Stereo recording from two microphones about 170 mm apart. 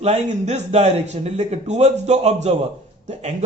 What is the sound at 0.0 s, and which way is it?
A man's voice, 40° right (ahead or behind).